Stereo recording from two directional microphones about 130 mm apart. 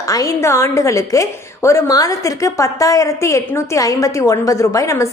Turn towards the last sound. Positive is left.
turn(degrees=25)  # may be behind; listen again after turning